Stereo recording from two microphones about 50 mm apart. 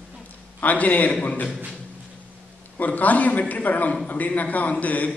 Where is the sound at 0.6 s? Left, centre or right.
Left.